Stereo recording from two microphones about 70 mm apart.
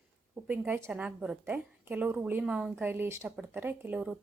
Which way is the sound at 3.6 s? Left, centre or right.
Right.